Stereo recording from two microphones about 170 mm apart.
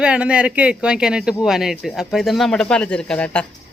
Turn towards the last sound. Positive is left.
turn(degrees=5)  # may be behind; listen again after turning